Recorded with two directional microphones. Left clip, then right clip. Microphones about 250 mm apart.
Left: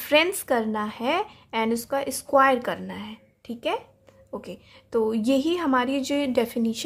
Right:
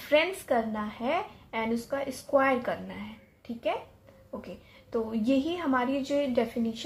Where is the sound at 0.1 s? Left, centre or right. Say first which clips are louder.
Left 4 dB; left.